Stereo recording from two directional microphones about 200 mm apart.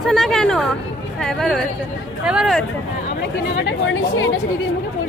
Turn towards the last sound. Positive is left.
turn(degrees=70)  # may be behind; listen again after turning